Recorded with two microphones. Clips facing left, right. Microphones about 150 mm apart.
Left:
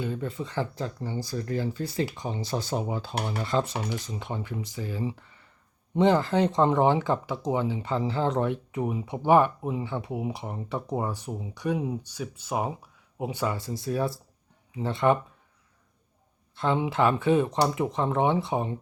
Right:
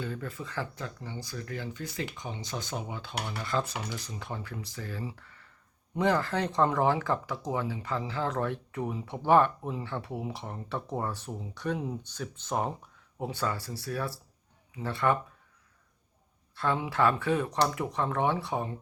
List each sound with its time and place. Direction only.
0.0 s speech: 20° left (ahead or behind)
16.6 s speech: 20° left (ahead or behind)